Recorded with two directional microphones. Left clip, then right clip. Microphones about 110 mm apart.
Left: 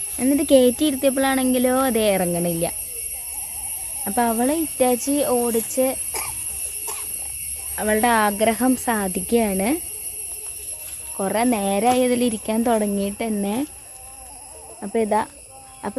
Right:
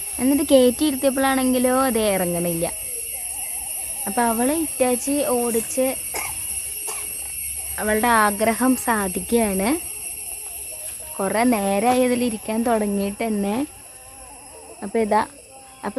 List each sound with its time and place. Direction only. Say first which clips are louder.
0.2 s speech: even; 15° left (ahead or behind)
4.0 s speech: even; 25° left (ahead or behind)
7.8 s speech: even; 20° left (ahead or behind)
11.2 s speech: right 1 dB; 5° left (ahead or behind)
12.2 s speech: left 2 dB; 30° left (ahead or behind)
13.0 s speech: right 1 dB; 5° left (ahead or behind)
14.8 s speech: right 1 dB; 5° left (ahead or behind)
15.8 s speech: even; 15° left (ahead or behind)